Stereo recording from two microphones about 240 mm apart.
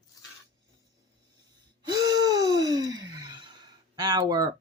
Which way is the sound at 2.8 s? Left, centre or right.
Right.